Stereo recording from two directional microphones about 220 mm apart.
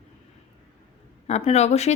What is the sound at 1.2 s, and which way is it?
Speech, 30° left (ahead or behind).